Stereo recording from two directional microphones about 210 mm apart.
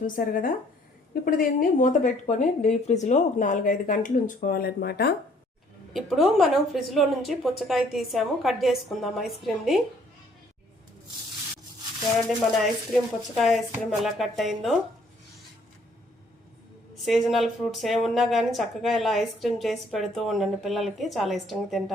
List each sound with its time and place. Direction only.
0.0 s speech: 40° left (ahead or behind)
5.9 s speech: centre (ahead or behind)
12.5 s speech: centre (ahead or behind)
17.1 s speech: centre (ahead or behind)